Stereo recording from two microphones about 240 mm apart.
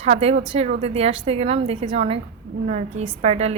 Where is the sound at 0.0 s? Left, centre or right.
Right.